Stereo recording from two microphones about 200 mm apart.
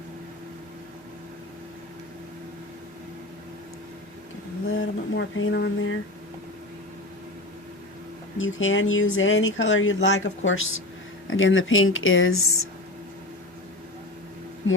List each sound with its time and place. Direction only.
4.7 s a sound: 75° left (ahead or behind)
8.4 s speech: 80° left
11.3 s speech: 75° left (ahead or behind)